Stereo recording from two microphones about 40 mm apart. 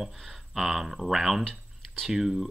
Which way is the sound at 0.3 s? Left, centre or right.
Centre.